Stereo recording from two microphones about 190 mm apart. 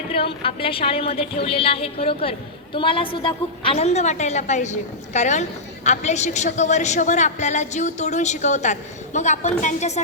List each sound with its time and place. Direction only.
0.1 s a woman's voice: 30° left (ahead or behind)